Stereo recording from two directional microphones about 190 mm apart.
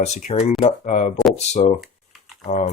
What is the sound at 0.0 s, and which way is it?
Speech, 35° left (ahead or behind).